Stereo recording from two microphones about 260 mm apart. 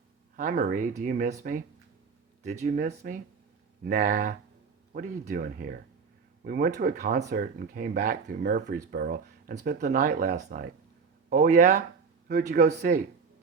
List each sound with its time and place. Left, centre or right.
0.3 s speech: right